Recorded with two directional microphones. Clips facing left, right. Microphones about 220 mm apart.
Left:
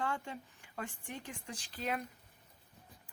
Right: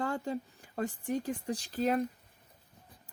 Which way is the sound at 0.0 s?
35° right (ahead or behind).